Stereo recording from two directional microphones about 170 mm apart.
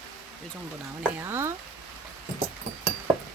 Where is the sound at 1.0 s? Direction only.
10° right (ahead or behind).